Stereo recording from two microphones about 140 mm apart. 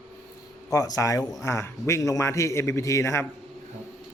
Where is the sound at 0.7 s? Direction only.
25° left (ahead or behind).